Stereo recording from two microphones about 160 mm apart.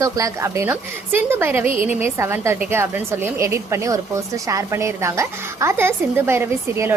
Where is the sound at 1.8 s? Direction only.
15° right (ahead or behind).